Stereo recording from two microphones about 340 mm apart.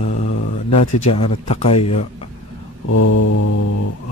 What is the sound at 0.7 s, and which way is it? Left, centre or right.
Mantra, left.